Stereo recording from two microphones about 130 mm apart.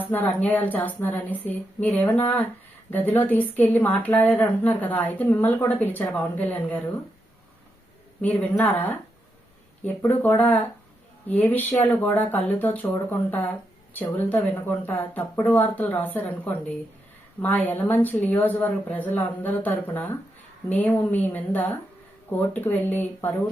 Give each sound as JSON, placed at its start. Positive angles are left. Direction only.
{"t": 0.0, "sound": "speech", "side_deg": 15}
{"t": 8.2, "sound": "speech", "side_deg": 10}
{"t": 10.0, "sound": "speech", "side_deg": 15}